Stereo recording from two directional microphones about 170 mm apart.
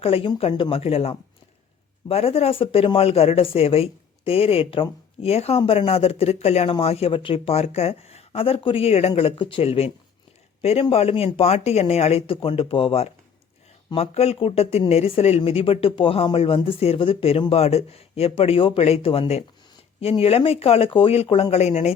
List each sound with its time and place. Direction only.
0.0 s speech: 35° left (ahead or behind)